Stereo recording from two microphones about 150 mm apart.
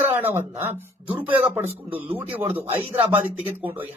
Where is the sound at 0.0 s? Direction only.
15° right (ahead or behind).